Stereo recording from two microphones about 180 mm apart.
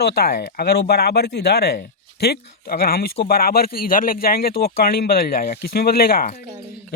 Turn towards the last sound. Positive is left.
turn(degrees=55)  # may be behind; listen again after turning